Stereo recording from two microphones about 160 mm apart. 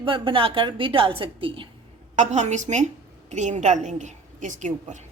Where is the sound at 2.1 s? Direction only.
50° right (ahead or behind).